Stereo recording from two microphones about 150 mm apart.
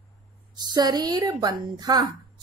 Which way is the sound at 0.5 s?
25° right (ahead or behind).